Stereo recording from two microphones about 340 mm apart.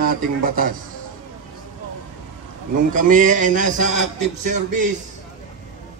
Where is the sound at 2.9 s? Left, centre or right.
Right.